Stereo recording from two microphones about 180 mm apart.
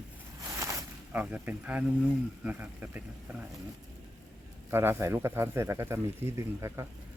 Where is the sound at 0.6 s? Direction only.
15° right (ahead or behind).